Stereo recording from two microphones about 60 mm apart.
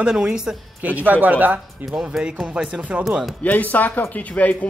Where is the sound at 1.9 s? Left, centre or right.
Centre.